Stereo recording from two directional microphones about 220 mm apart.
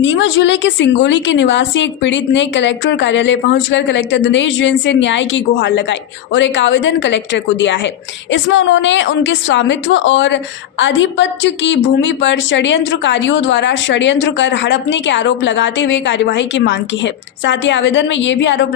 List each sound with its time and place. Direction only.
0.0 s a woman's voice: 60° left (ahead or behind)